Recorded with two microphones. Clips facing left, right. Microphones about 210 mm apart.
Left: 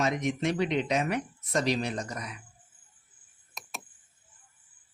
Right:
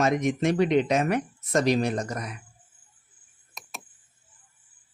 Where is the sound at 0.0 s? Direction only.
50° right (ahead or behind).